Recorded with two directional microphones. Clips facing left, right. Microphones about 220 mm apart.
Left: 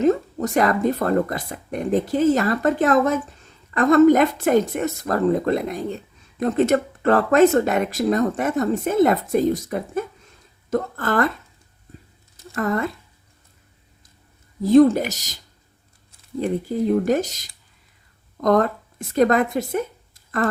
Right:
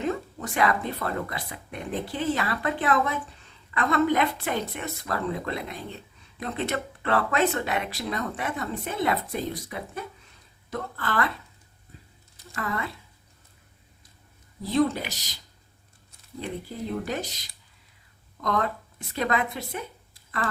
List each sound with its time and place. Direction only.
0.0 s speech: 40° left (ahead or behind)
12.5 s speech: 45° left (ahead or behind)
14.6 s speech: 45° left (ahead or behind)
16.4 s speech: 45° left (ahead or behind)